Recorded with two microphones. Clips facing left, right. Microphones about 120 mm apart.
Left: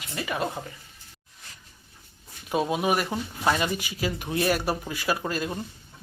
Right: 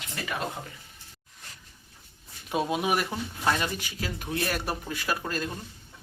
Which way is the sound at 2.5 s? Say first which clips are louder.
Left 2 dB; centre (ahead or behind).